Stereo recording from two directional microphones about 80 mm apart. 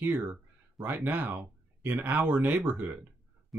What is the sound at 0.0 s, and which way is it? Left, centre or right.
Speech, right.